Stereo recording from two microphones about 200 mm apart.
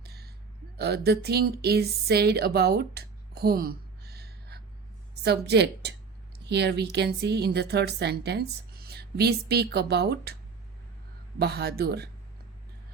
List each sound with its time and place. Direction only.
0.0 s a sound: 55° right (ahead or behind)
0.8 s a woman's voice: 55° right (ahead or behind)
11.3 s speech: 50° right (ahead or behind)